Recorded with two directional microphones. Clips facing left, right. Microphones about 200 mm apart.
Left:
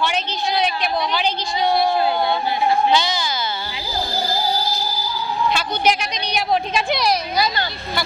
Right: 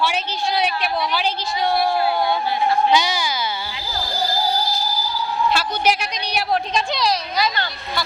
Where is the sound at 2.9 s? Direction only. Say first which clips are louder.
Even; 10° right (ahead or behind).